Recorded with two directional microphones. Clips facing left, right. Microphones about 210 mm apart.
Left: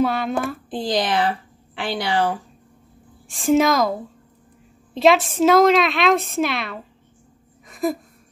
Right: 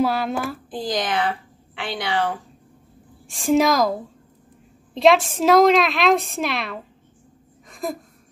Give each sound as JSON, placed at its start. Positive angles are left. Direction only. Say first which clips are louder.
{"t": 0.0, "sound": "a woman's voice", "louder": "left 1 dB", "side_deg": 0}
{"t": 0.7, "sound": "a woman's voice", "louder": "left 3 dB", "side_deg": 30}
{"t": 3.3, "sound": "a woman's voice", "louder": "left 1 dB", "side_deg": 0}
{"t": 4.9, "sound": "a woman's voice", "louder": "even", "side_deg": 0}
{"t": 7.6, "sound": "a sound", "louder": "left 6 dB", "side_deg": 5}